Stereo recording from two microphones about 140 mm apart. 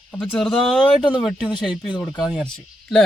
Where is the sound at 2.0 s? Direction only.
25° left (ahead or behind).